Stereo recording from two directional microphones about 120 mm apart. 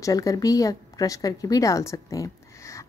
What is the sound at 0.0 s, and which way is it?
A woman's voice, 25° left (ahead or behind).